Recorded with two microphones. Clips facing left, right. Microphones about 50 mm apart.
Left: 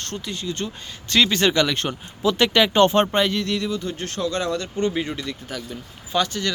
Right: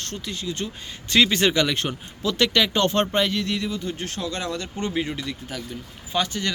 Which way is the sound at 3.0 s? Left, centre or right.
Centre.